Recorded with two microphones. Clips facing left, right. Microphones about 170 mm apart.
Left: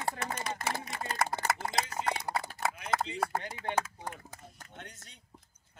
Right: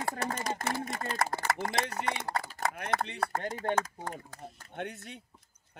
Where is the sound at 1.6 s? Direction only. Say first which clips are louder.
Right 2 dB; 65° right (ahead or behind).